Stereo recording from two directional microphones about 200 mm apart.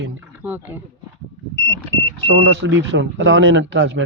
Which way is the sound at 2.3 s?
65° right (ahead or behind).